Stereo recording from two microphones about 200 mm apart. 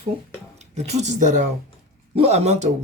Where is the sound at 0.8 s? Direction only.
35° right (ahead or behind).